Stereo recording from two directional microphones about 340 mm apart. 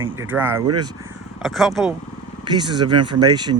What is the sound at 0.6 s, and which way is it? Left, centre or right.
Speech, right.